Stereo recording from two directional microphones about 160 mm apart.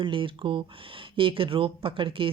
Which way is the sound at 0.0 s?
30° right (ahead or behind).